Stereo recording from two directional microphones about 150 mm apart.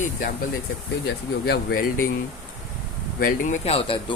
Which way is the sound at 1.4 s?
90° left.